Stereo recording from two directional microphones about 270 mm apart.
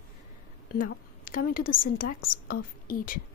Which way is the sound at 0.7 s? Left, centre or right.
Left.